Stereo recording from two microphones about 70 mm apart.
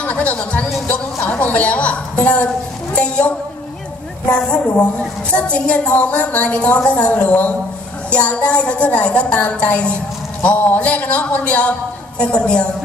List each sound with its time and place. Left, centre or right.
0.0 s a woman's voice: left